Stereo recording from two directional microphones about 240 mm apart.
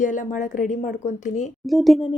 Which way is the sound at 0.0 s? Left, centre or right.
Left.